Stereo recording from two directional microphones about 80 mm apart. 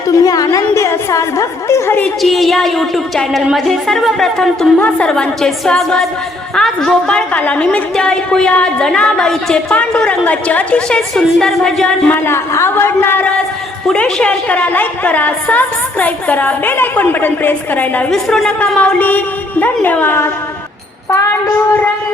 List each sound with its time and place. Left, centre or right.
0.1 s a sound: left
0.7 s a woman's voice: left
2.2 s a woman's voice: centre
12.1 s a woman's voice: left
13.8 s a woman's voice: centre
18.1 s a woman's voice: centre
18.6 s a woman's voice: centre